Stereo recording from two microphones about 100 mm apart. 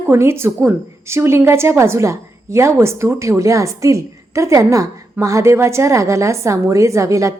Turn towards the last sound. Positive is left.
turn(degrees=-30)  # may be behind; listen again after turning